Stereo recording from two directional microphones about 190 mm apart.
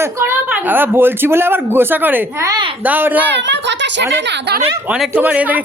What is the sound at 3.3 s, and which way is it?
Speech, 70° right (ahead or behind).